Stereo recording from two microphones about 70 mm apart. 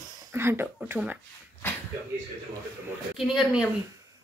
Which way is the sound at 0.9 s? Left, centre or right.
Centre.